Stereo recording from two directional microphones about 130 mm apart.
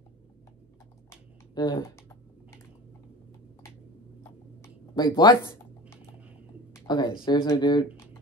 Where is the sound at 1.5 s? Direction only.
35° left (ahead or behind).